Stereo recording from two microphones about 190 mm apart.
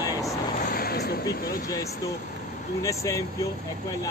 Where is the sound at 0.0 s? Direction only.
15° left (ahead or behind).